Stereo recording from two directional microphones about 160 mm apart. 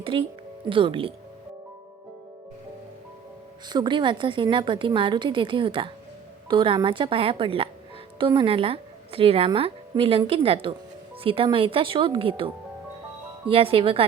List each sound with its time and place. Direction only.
0.0 s a woman's voice: 35° right (ahead or behind)
3.7 s a woman's voice: 25° right (ahead or behind)
13.5 s a woman's voice: 35° right (ahead or behind)